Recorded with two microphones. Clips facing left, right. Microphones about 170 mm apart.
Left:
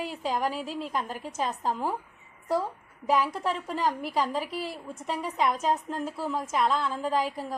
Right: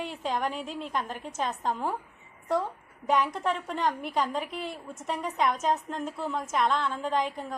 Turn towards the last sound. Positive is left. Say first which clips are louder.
# left 1 dB
turn(degrees=5)  # may be behind; listen again after turning